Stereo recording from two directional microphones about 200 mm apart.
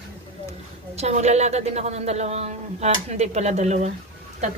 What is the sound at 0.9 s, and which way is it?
Dishes, 35° right (ahead or behind).